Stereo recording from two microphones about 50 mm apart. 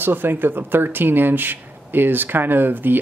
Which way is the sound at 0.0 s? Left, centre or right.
Right.